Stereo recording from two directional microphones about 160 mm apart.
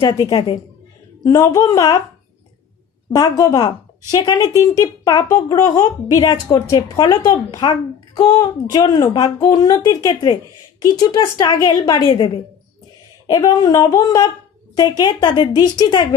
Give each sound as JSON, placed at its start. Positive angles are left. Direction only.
{"t": 0.0, "sound": "a woman's voice", "side_deg": 30}
{"t": 1.2, "sound": "a child's voice", "side_deg": 20}
{"t": 3.1, "sound": "a child's voice", "side_deg": 20}
{"t": 13.3, "sound": "a child's voice", "side_deg": 25}